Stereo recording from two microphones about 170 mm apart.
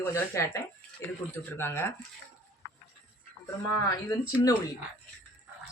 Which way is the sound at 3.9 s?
20° left (ahead or behind).